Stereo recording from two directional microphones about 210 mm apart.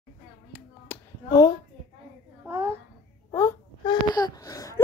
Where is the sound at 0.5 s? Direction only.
15° left (ahead or behind).